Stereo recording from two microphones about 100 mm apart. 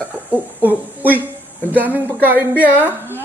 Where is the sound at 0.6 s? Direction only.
15° right (ahead or behind).